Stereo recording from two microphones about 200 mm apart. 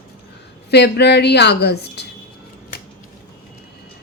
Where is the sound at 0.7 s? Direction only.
55° left (ahead or behind).